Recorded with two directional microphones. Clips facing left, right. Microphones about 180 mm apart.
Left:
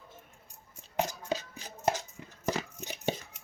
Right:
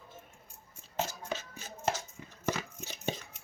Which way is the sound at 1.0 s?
15° left (ahead or behind).